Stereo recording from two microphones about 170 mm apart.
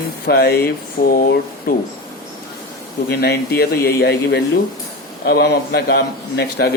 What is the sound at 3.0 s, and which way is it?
Speech, 70° left (ahead or behind).